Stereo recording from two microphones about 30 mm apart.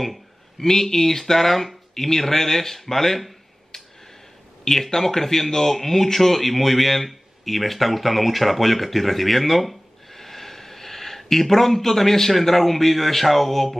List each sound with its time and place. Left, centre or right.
0.6 s speech: centre
3.7 s a sound: centre
4.6 s a man's voice: centre